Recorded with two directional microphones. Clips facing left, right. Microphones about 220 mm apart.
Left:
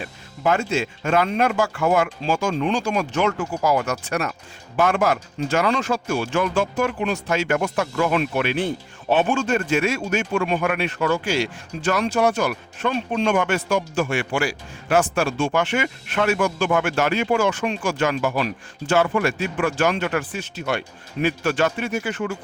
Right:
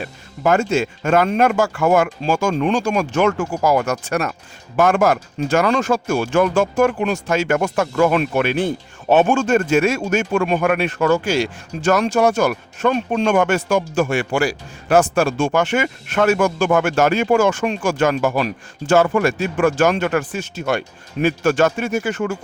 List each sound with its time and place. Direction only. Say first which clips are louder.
0.4 s speech: right 4 dB; 45° right (ahead or behind)